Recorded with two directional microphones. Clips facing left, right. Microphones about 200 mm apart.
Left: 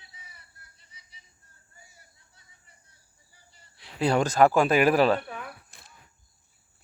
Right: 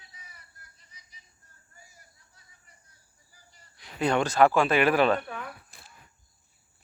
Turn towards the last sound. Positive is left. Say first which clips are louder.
# left 1 dB
turn(degrees=30)  # may be behind; listen again after turning